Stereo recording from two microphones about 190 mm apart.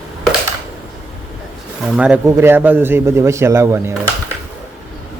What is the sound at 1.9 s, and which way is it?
A man's voice, 5° right (ahead or behind).